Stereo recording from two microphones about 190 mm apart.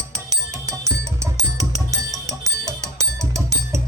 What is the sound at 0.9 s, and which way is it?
Music, 15° right (ahead or behind).